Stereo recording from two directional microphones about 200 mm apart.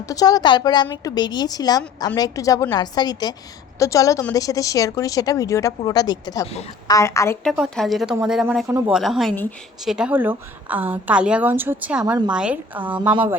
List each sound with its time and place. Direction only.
0.1 s a woman's voice: 20° left (ahead or behind)
7.5 s a woman's voice: centre (ahead or behind)
12.0 s a woman's voice: 20° right (ahead or behind)
12.3 s a woman's voice: 5° right (ahead or behind)